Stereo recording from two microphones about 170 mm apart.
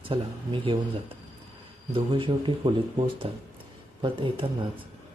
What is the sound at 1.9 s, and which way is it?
Speech, 30° right (ahead or behind).